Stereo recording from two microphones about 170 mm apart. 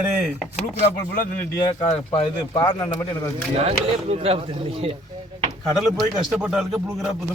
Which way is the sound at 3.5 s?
35° right (ahead or behind).